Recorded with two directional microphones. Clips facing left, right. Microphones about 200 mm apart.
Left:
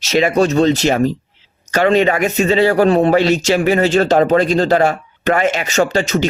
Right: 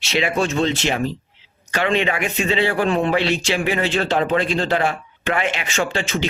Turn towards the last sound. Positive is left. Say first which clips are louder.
# left 7 dB
turn(degrees=40)  # may be behind; listen again after turning